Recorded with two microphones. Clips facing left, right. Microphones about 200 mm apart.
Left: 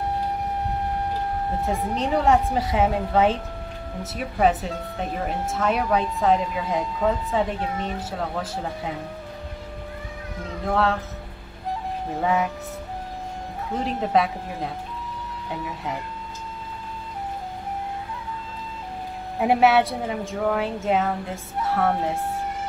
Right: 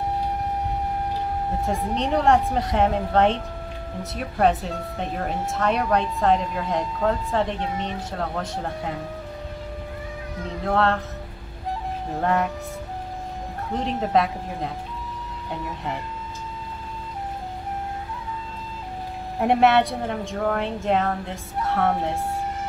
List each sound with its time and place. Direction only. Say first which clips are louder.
1.7 s speech: even; centre (ahead or behind)
10.6 s speech: right 1 dB; centre (ahead or behind)
12.2 s speech: even; centre (ahead or behind)
13.7 s speech: even; centre (ahead or behind)
19.3 s speech: even; centre (ahead or behind)